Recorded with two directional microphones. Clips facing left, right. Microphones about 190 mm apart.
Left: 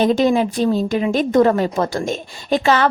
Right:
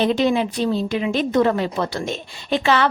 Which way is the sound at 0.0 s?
45° left (ahead or behind).